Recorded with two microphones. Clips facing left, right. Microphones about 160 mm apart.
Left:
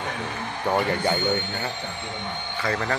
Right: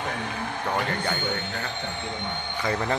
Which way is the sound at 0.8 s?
15° left (ahead or behind).